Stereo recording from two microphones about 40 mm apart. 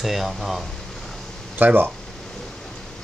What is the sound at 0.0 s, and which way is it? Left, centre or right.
Speech, centre.